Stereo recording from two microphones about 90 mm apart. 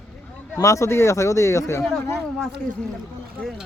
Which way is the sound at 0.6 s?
35° left (ahead or behind).